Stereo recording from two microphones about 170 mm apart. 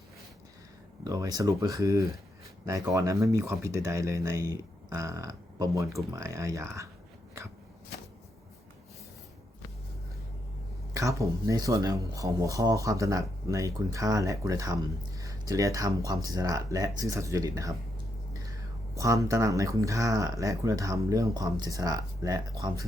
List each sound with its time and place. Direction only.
1.0 s speech: 20° right (ahead or behind)
10.9 s speech: 20° right (ahead or behind)
18.9 s speech: 20° right (ahead or behind)